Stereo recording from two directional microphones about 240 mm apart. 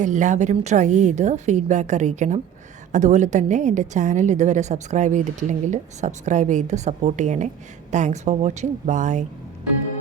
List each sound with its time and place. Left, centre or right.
0.0 s a woman's voice: right